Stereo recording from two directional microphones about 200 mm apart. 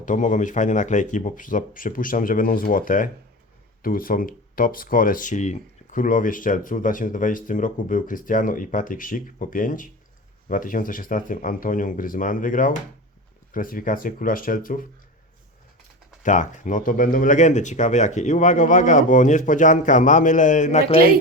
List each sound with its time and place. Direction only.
0.0 s speech: 40° left (ahead or behind)
16.2 s speech: 40° left (ahead or behind)